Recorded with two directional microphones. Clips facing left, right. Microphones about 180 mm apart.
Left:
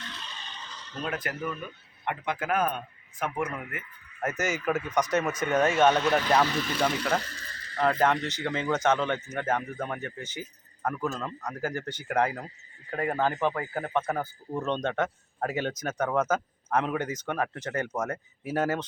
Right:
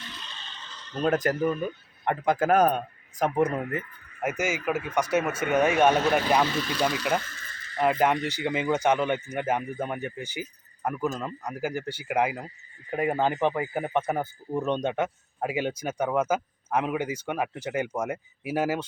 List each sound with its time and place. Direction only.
1.0 s speech: 40° right (ahead or behind)
4.2 s a man's voice: 10° right (ahead or behind)
7.2 s a sound: 35° left (ahead or behind)
7.8 s a man's voice: 15° right (ahead or behind)